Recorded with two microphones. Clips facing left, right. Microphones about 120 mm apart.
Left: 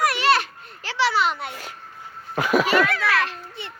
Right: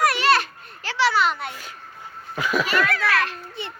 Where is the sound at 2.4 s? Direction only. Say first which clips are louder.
Left 4 dB; 60° left (ahead or behind).